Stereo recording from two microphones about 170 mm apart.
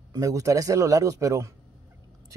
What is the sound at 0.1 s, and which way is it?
A man's voice, 20° right (ahead or behind).